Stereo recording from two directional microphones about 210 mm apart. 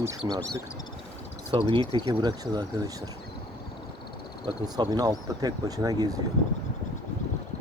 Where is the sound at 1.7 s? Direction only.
20° right (ahead or behind).